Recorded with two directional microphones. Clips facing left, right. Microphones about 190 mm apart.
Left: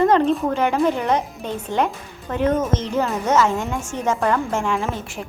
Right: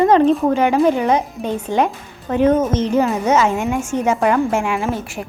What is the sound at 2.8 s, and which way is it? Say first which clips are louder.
A woman's voice: right 5 dB; 15° right (ahead or behind).